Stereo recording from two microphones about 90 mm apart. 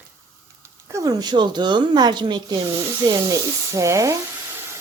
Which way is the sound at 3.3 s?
35° right (ahead or behind).